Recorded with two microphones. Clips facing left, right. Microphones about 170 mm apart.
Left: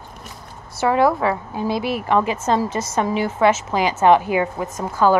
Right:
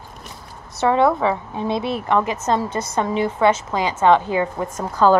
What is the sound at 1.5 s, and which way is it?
Speech, 25° right (ahead or behind).